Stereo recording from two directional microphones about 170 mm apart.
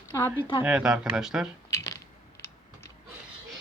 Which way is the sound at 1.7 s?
20° left (ahead or behind).